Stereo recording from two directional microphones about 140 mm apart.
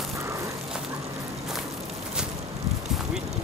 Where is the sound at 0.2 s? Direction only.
20° right (ahead or behind).